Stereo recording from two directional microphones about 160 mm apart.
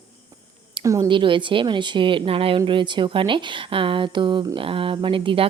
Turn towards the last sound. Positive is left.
turn(degrees=-30)  # may be behind; listen again after turning